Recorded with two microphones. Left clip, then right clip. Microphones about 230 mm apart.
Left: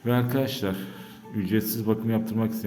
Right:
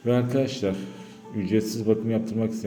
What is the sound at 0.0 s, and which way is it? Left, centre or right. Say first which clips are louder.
A man's voice: right 2 dB; centre.